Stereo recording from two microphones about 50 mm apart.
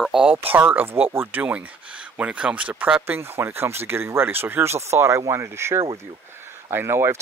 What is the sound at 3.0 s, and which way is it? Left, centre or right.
Speech, right.